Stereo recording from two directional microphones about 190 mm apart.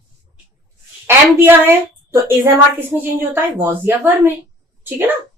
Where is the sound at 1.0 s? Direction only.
10° right (ahead or behind).